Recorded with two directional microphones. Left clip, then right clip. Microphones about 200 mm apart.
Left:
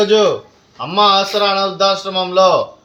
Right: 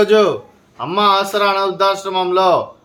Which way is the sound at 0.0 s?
20° right (ahead or behind).